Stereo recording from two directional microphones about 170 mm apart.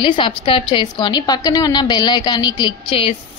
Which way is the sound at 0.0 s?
30° left (ahead or behind).